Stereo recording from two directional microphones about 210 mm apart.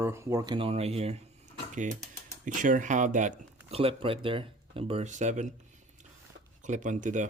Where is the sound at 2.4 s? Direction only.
40° right (ahead or behind).